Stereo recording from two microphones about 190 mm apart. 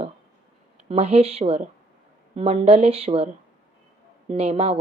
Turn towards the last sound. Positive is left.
turn(degrees=-30)  # may be behind; listen again after turning